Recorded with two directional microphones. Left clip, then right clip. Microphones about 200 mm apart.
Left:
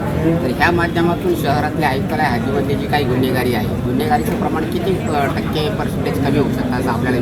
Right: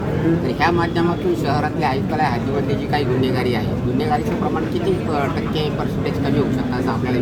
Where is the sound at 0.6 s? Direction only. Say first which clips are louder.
Left 3 dB; 15° left (ahead or behind).